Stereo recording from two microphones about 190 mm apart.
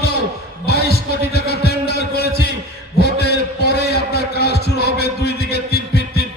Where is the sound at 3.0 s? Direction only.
60° left (ahead or behind).